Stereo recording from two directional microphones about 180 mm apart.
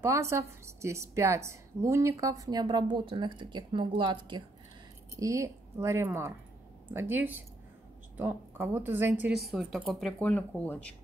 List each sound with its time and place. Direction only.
0.0 s a woman's voice: 15° right (ahead or behind); by 10.9 s 10° left (ahead or behind)